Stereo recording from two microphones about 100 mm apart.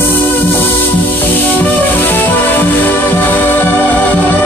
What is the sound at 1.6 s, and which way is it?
Music, 20° left (ahead or behind).